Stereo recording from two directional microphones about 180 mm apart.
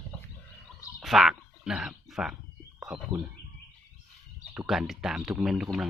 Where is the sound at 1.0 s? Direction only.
Centre (ahead or behind).